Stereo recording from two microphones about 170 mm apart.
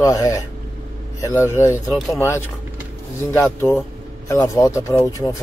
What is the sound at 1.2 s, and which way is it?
Mantra, 15° left (ahead or behind).